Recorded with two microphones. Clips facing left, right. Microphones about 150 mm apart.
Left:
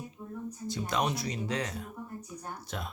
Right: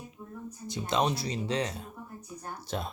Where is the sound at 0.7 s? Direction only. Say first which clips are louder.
Right 3 dB; 25° right (ahead or behind).